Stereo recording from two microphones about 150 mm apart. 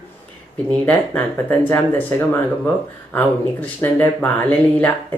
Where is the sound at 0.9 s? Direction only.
10° left (ahead or behind).